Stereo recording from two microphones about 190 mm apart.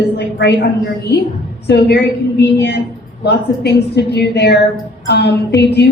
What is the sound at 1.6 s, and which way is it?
A woman's voice, 60° left (ahead or behind).